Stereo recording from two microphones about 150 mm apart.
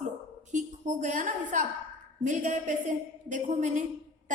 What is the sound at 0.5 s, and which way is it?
A woman's voice, 55° right (ahead or behind).